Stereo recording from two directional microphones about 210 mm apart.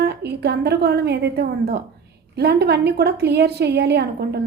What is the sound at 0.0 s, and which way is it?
A woman's voice, 50° right (ahead or behind).